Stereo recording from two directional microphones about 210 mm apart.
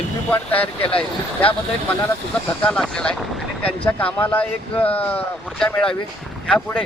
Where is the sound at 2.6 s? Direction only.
5° left (ahead or behind).